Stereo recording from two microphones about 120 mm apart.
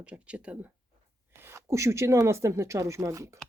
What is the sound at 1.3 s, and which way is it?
Speech, 20° right (ahead or behind).